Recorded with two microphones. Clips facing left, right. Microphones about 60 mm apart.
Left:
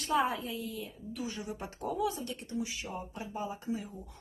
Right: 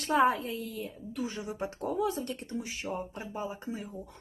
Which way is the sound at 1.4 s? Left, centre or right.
Right.